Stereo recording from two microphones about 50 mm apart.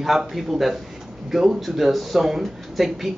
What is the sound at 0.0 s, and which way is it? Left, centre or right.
Speech, centre.